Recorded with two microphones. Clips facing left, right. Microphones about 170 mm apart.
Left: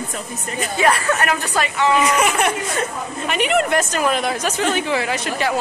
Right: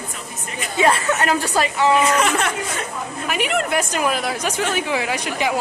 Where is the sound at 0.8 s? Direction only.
20° right (ahead or behind).